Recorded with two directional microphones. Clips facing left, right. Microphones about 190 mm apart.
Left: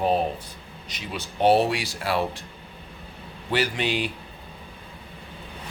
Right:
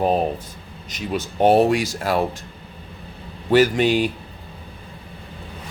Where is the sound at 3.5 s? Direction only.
45° right (ahead or behind).